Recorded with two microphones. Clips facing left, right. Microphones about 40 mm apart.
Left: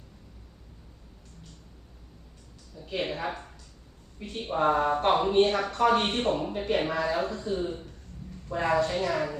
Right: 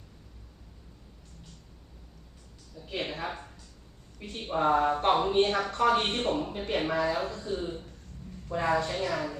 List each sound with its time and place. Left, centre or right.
2.7 s speech: centre